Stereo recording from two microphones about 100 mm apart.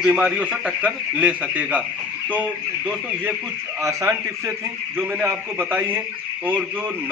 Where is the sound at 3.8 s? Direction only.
30° right (ahead or behind).